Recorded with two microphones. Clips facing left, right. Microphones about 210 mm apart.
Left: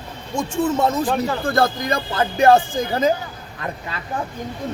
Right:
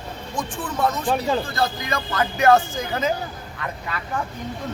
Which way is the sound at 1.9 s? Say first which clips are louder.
Left 3 dB; 30° left (ahead or behind).